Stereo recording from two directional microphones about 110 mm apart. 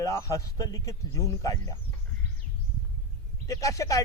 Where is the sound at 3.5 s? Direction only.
30° left (ahead or behind).